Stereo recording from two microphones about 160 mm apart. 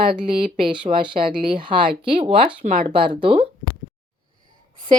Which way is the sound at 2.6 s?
60° right (ahead or behind).